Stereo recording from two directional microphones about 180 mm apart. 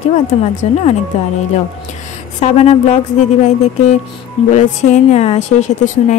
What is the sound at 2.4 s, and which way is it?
Speech, 35° left (ahead or behind).